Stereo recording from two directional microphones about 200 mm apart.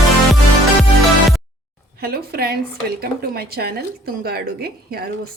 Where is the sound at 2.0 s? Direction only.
50° right (ahead or behind).